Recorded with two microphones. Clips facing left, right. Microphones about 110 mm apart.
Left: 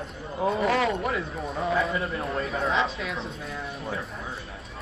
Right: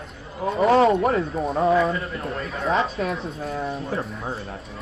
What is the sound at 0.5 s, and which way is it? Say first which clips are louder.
Speech: right 10 dB; 30° right (ahead or behind).